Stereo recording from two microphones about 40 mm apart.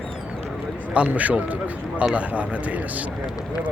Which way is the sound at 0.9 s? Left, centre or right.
Right.